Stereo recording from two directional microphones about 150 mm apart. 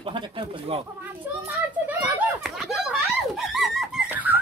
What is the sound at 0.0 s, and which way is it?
Speech, 35° right (ahead or behind).